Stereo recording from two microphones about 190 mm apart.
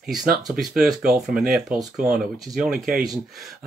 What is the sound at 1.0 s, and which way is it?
Speech, 5° right (ahead or behind).